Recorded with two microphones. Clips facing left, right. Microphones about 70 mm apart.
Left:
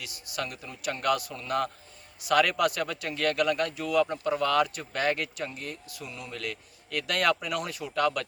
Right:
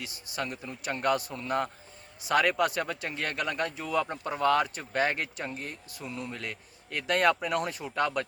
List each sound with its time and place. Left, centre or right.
0.0 s speech: right